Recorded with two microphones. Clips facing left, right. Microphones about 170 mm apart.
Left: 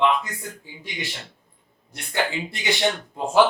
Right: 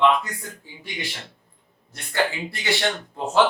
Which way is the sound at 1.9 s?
15° left (ahead or behind).